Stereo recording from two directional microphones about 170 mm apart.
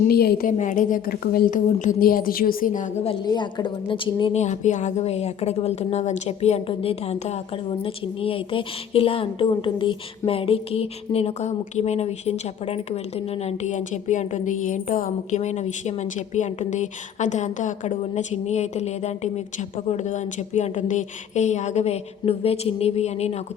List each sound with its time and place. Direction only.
0.1 s a woman's voice: 65° left (ahead or behind)
0.5 s a woman's voice: 50° left (ahead or behind)
3.1 s a woman's voice: 25° left (ahead or behind)